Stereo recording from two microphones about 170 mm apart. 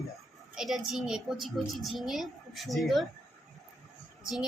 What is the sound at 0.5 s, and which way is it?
A woman's voice, centre (ahead or behind).